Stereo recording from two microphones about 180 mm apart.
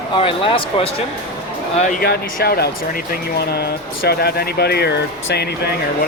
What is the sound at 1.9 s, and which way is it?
Speech, 60° left (ahead or behind).